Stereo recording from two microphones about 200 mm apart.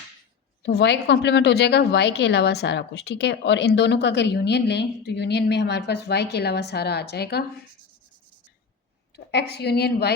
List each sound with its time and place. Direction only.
0.6 s a woman's voice: 55° left (ahead or behind)
9.1 s a woman's voice: 55° left (ahead or behind)